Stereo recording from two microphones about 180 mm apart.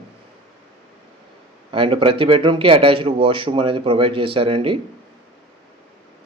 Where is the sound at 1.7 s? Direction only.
30° right (ahead or behind).